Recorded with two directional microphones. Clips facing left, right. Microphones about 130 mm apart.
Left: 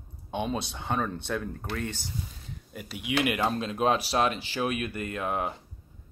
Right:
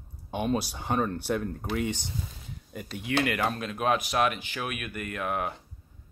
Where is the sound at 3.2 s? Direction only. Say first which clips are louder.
Left 1 dB; 20° left (ahead or behind).